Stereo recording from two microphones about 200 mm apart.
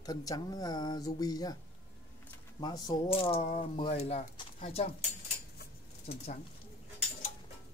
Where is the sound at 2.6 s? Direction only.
20° left (ahead or behind).